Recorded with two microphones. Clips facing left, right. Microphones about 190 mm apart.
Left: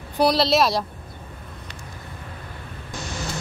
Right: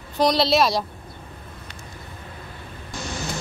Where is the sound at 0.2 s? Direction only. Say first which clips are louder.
Even; centre (ahead or behind).